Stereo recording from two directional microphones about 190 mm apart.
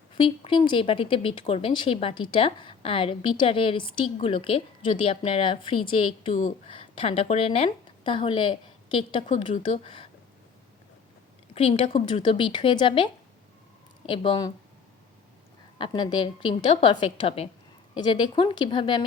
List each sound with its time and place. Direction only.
0.2 s a woman's voice: 25° left (ahead or behind)
11.5 s speech: 30° left (ahead or behind)
14.1 s speech: 25° left (ahead or behind)
15.8 s speech: 25° left (ahead or behind)